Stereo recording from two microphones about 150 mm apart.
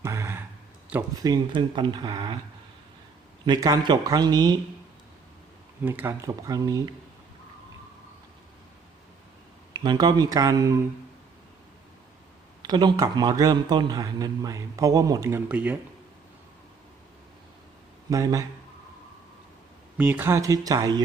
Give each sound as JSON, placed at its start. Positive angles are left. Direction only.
{"t": 0.0, "sound": "a sound", "side_deg": -20}
{"t": 1.2, "sound": "speech", "side_deg": -30}
{"t": 3.4, "sound": "speech", "side_deg": -25}
{"t": 5.8, "sound": "speech", "side_deg": -15}
{"t": 9.7, "sound": "speech", "side_deg": -30}
{"t": 12.6, "sound": "speech", "side_deg": -30}
{"t": 18.1, "sound": "speech", "side_deg": -25}
{"t": 20.0, "sound": "speech", "side_deg": -10}